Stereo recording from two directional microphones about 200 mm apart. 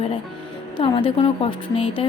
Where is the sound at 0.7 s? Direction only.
25° left (ahead or behind).